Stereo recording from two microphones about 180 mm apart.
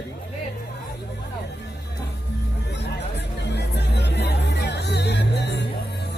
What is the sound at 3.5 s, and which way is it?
Music, 65° left (ahead or behind).